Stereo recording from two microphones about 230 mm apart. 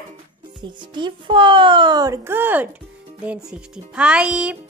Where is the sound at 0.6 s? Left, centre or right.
Centre.